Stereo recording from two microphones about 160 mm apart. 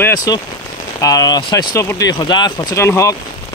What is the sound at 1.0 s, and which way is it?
Speech, 25° left (ahead or behind).